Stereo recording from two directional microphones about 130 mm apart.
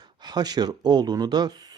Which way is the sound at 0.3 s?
30° right (ahead or behind).